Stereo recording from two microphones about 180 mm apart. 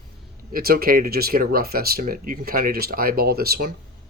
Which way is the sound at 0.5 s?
55° right (ahead or behind).